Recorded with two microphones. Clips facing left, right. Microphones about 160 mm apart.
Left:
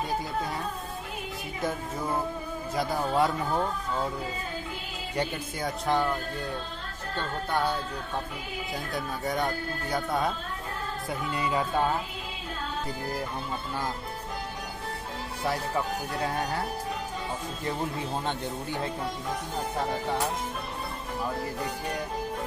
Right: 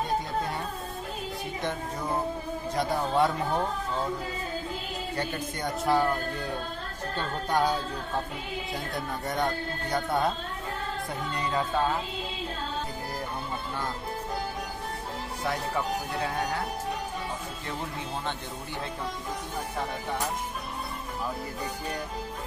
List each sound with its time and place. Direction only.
2.7 s speech: 5° left (ahead or behind)
5.6 s speech: 5° right (ahead or behind)
7.2 s music: 10° right (ahead or behind)
8.9 s speech: centre (ahead or behind)